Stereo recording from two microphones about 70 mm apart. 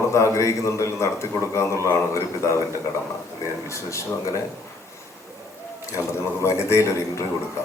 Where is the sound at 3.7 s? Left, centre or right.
Left.